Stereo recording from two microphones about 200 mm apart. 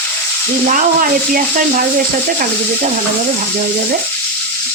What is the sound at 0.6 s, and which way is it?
Frying, 45° right (ahead or behind).